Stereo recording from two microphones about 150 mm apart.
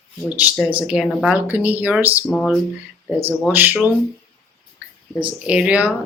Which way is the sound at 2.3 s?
Centre (ahead or behind).